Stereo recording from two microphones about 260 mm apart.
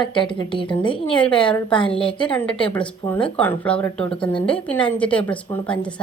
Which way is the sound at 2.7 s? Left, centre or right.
Centre.